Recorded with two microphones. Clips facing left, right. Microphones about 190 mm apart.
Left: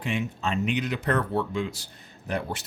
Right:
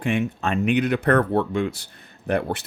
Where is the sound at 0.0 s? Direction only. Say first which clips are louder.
Right 6 dB; 55° right (ahead or behind).